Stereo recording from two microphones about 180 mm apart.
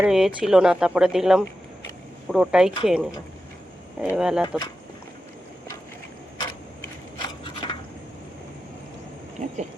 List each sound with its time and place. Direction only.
0.0 s speech: 5° right (ahead or behind)
4.1 s speech: 5° right (ahead or behind)
4.4 s speech: 25° left (ahead or behind)
7.2 s a sound: 25° left (ahead or behind)